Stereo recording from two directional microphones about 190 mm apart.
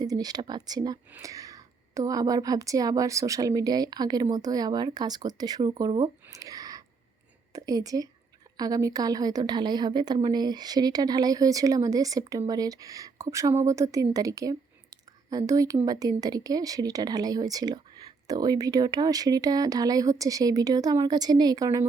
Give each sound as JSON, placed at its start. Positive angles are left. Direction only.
{"t": 0.0, "sound": "speech", "side_deg": -20}
{"t": 6.2, "sound": "a sound", "side_deg": -15}
{"t": 7.5, "sound": "speech", "side_deg": -20}